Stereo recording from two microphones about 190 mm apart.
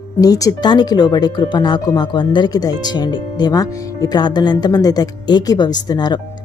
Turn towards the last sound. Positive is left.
turn(degrees=20)  # may be behind; listen again after turning